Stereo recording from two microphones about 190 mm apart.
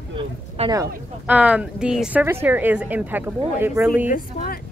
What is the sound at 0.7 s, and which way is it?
Speech, 10° right (ahead or behind).